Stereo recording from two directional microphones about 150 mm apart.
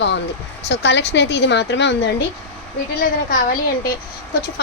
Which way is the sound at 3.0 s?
70° left (ahead or behind).